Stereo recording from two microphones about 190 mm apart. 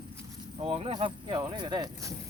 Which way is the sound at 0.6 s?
30° right (ahead or behind).